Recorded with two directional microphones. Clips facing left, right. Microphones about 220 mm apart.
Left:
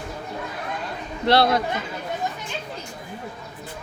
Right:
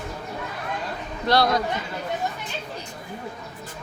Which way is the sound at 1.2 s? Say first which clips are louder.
Left 2 dB; 25° left (ahead or behind).